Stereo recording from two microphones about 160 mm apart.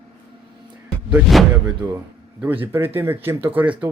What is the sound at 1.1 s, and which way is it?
Speech, 5° right (ahead or behind).